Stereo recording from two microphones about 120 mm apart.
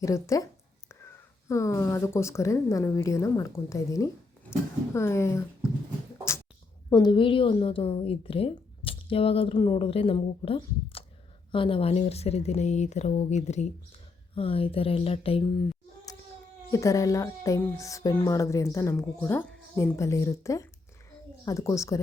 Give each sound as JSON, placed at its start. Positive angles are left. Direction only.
{"t": 0.0, "sound": "speech", "side_deg": 25}
{"t": 6.9, "sound": "a woman's voice", "side_deg": 40}
{"t": 14.3, "sound": "a woman's voice", "side_deg": 50}
{"t": 16.7, "sound": "speech", "side_deg": 25}